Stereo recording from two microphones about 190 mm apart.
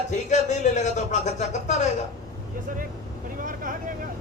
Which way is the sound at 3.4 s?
45° right (ahead or behind).